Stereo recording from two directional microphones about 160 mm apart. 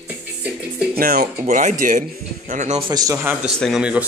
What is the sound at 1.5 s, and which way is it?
Speech, 55° right (ahead or behind).